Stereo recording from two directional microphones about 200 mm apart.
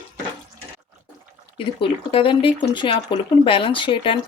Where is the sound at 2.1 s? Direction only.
25° left (ahead or behind).